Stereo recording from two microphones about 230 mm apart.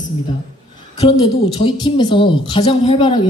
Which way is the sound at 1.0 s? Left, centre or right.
Left.